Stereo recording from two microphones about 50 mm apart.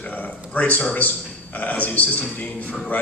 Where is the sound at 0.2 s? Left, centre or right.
Left.